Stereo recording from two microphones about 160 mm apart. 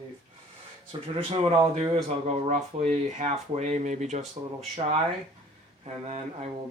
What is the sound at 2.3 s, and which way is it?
Speech, 45° right (ahead or behind).